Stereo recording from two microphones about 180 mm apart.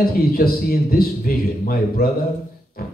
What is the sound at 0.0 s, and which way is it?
A man's voice, 55° left (ahead or behind).